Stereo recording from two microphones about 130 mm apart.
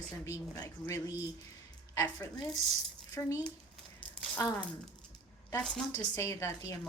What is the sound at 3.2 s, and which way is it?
Speech, 25° left (ahead or behind).